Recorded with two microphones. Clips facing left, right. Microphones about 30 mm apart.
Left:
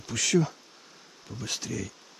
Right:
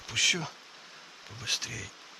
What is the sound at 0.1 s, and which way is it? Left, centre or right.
Speech, centre.